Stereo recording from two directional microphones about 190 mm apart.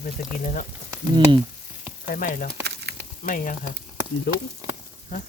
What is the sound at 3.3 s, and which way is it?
Speech, 45° left (ahead or behind).